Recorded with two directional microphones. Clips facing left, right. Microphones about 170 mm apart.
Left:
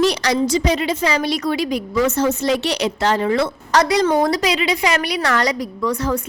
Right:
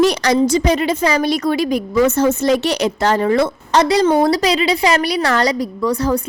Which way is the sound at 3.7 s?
25° right (ahead or behind).